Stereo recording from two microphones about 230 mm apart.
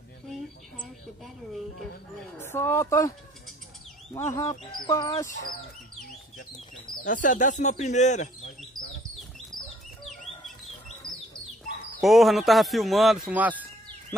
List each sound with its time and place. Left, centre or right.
0.3 s a sound: centre
2.4 s speech: centre
4.1 s speech: centre
7.1 s speech: left
11.0 s bird: left
12.0 s speech: centre